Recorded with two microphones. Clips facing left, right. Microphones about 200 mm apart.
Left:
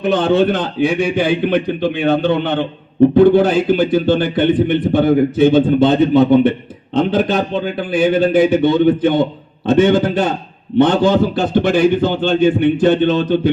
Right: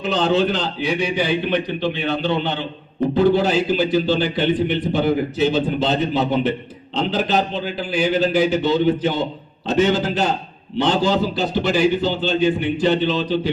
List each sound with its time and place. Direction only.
0.0 s a man's voice: 55° left (ahead or behind)